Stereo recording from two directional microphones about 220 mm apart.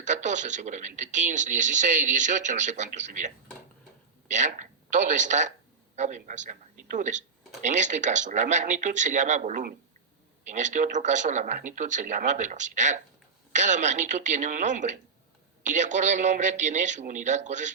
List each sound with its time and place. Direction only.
0.0 s speech: 35° right (ahead or behind)